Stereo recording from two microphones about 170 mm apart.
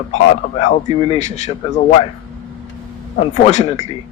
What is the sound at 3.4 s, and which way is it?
Speech, 40° left (ahead or behind).